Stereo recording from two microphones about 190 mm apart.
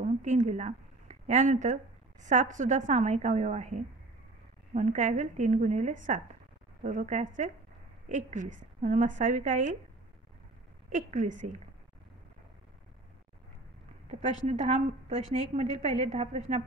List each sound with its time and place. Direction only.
0.0 s a woman's voice: 40° right (ahead or behind)
10.9 s a woman's voice: 40° right (ahead or behind)
14.2 s a woman's voice: 35° right (ahead or behind)